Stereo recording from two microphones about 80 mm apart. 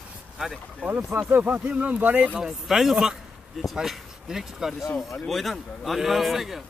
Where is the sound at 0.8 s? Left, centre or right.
Right.